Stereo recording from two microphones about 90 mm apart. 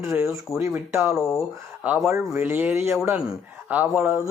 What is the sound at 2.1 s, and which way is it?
Speech, 25° right (ahead or behind).